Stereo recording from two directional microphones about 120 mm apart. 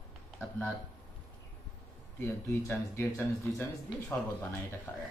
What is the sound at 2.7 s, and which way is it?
Speech, 20° left (ahead or behind).